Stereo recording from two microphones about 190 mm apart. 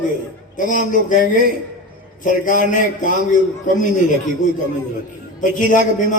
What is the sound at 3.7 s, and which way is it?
Speech, 45° left (ahead or behind).